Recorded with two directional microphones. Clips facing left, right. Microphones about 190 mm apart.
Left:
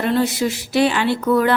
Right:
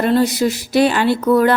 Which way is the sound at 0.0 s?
40° right (ahead or behind).